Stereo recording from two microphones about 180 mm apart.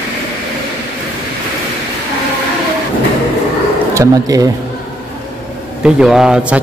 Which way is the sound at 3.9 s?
20° right (ahead or behind).